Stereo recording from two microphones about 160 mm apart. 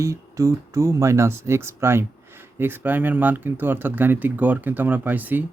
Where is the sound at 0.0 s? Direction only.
20° right (ahead or behind).